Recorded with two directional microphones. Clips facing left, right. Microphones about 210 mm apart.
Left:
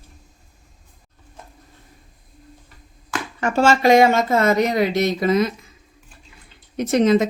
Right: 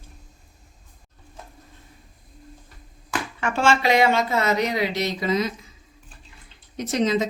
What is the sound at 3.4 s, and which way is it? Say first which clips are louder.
Speech: left 5 dB; 40° left (ahead or behind).